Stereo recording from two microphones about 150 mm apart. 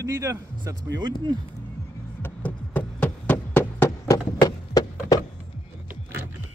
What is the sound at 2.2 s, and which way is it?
Knock, 10° left (ahead or behind).